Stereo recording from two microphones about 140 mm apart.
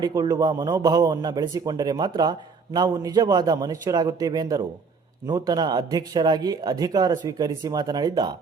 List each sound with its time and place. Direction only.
0.0 s speech: 25° right (ahead or behind)